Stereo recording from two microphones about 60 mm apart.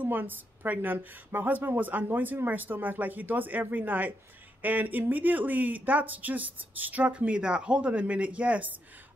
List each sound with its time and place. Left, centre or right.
0.0 s a woman's voice: right